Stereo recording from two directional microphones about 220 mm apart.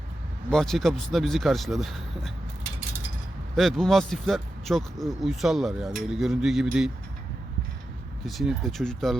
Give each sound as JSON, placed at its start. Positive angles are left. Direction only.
{"t": 0.5, "sound": "speech", "side_deg": 0}
{"t": 3.5, "sound": "speech", "side_deg": 0}
{"t": 8.3, "sound": "speech", "side_deg": 0}